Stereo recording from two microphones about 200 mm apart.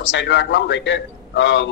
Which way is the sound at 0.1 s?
65° left (ahead or behind).